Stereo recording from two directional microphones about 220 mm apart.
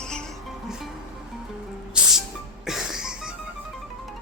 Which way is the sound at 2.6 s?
Centre (ahead or behind).